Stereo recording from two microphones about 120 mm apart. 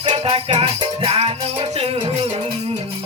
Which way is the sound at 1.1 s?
55° right (ahead or behind).